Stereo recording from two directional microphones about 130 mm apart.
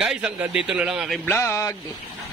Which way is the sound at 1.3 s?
20° left (ahead or behind).